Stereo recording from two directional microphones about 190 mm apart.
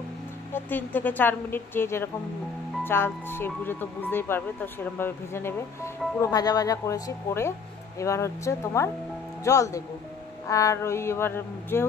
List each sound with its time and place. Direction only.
0.5 s speech: 10° left (ahead or behind)